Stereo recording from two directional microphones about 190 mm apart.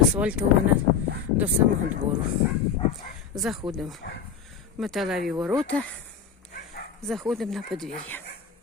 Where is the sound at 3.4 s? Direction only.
Centre (ahead or behind).